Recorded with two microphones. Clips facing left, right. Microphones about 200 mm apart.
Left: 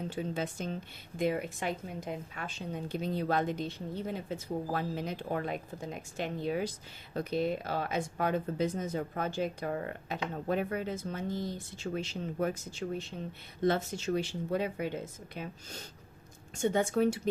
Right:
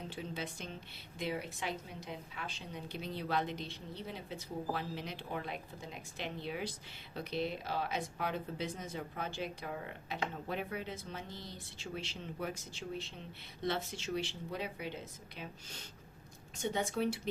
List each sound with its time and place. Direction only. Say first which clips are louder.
0.1 s a woman's voice: left 7 dB; 45° left (ahead or behind)